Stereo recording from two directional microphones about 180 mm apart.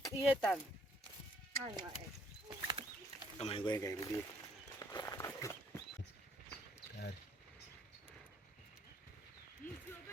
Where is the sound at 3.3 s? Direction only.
30° left (ahead or behind).